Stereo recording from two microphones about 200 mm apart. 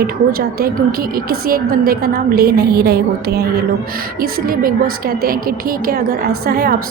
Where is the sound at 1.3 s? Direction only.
50° right (ahead or behind).